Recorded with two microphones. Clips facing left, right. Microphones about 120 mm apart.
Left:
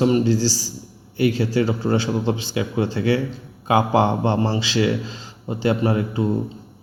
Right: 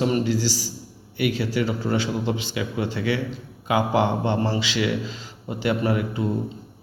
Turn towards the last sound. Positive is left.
turn(degrees=30)  # may be behind; listen again after turning